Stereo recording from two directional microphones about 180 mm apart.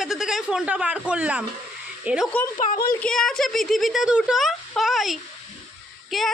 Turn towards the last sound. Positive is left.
turn(degrees=0)  # may be behind; listen again after turning